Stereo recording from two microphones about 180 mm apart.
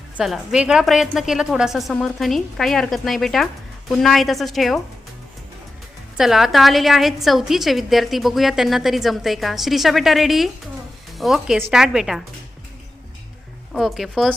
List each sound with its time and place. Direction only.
0.2 s a woman's voice: 5° right (ahead or behind)
6.1 s a woman's voice: centre (ahead or behind)
13.7 s a woman's voice: centre (ahead or behind)